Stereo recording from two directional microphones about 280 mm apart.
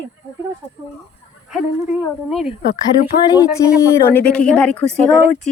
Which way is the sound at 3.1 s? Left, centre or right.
Left.